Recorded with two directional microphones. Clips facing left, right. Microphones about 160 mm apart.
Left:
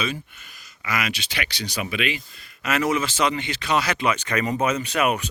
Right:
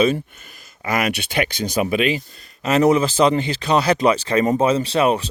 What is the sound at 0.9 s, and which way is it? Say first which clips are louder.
Speech: right 6 dB; 55° right (ahead or behind).